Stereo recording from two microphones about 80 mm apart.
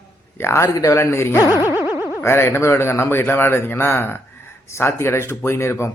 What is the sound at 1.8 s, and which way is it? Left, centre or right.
Boing, right.